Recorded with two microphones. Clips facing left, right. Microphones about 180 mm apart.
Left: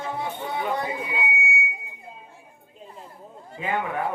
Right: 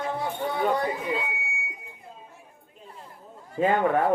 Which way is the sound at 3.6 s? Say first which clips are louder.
Right 8 dB; 45° right (ahead or behind).